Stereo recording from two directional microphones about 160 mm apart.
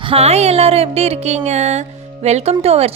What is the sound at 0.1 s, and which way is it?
A woman's voice, 40° right (ahead or behind).